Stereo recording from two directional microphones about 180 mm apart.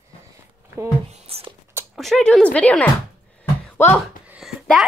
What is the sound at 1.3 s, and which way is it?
Speech, 35° right (ahead or behind).